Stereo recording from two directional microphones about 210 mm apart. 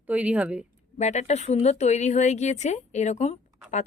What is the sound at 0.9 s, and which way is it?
Speech, 35° left (ahead or behind).